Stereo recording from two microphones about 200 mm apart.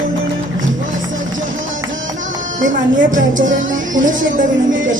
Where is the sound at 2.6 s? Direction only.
40° right (ahead or behind).